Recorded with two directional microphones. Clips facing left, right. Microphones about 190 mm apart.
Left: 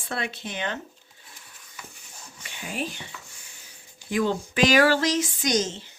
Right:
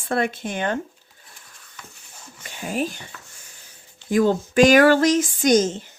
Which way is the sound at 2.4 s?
45° right (ahead or behind).